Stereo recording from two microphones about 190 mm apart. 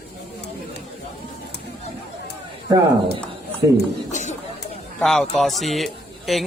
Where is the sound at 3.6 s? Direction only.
15° right (ahead or behind).